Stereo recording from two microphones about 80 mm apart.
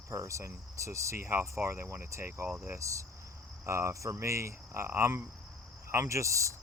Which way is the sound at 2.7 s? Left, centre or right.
Right.